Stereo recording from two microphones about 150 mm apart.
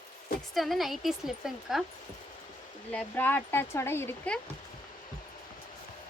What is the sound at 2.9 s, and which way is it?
Speech, 10° left (ahead or behind).